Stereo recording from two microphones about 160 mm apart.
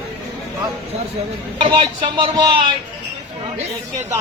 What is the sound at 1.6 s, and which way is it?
Speech, 30° right (ahead or behind).